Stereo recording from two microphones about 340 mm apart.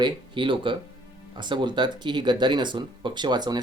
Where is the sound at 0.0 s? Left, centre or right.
Centre.